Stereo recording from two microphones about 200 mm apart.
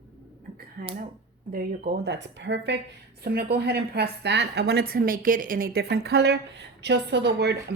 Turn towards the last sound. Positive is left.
turn(degrees=-55)  # may be behind; listen again after turning